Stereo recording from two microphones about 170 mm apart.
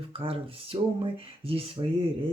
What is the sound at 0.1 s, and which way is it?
Speech, 30° right (ahead or behind).